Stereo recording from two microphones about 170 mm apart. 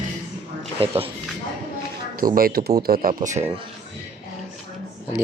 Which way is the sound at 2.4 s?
65° right (ahead or behind).